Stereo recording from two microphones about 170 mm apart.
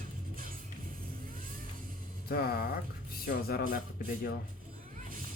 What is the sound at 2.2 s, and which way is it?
Speech, 65° left (ahead or behind).